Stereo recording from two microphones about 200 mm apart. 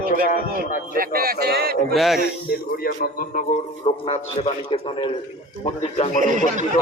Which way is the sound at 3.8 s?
30° left (ahead or behind).